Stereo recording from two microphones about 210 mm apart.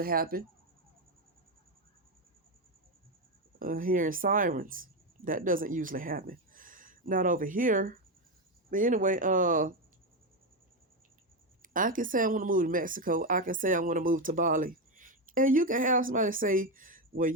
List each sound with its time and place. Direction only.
0.0 s speech: 45° right (ahead or behind)
3.6 s speech: 40° right (ahead or behind)
11.6 s speech: 40° right (ahead or behind)